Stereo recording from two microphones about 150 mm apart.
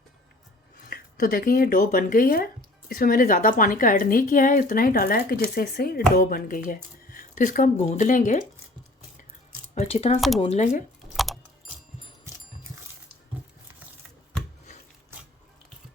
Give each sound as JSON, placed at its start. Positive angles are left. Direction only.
{"t": 0.9, "sound": "a woman's voice", "side_deg": 70}
{"t": 6.7, "sound": "speech", "side_deg": 65}
{"t": 9.7, "sound": "speech", "side_deg": 45}
{"t": 10.2, "sound": "speech", "side_deg": 0}
{"t": 10.4, "sound": "speech", "side_deg": 50}